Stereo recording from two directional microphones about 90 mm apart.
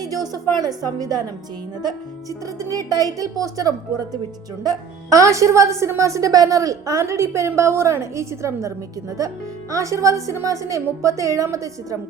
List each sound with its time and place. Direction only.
0.0 s a sound: 45° right (ahead or behind)
0.5 s a woman's voice: 45° right (ahead or behind)
2.9 s a woman's voice: 45° right (ahead or behind)